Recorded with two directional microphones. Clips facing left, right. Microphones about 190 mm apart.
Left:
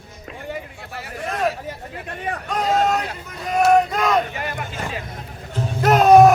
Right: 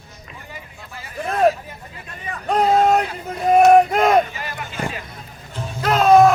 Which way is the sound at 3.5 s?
55° right (ahead or behind).